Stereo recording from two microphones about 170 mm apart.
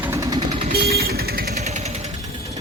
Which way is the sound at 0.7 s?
65° right (ahead or behind).